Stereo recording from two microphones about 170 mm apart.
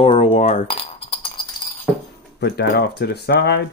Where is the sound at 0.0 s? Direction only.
35° left (ahead or behind).